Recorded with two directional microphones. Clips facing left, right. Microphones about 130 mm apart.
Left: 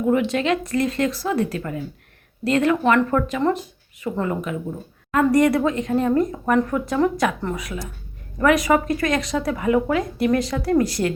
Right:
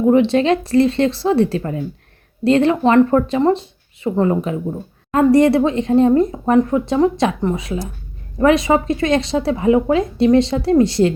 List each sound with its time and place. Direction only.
0.1 s speech: 30° right (ahead or behind)